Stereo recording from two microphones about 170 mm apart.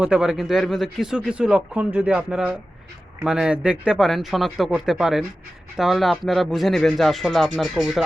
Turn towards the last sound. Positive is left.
turn(degrees=0)  # may be behind; listen again after turning